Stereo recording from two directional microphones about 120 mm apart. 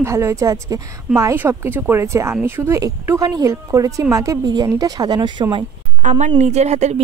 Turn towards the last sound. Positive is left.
turn(degrees=-70)  # may be behind; listen again after turning